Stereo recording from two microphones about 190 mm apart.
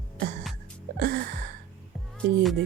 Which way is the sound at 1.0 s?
55° right (ahead or behind).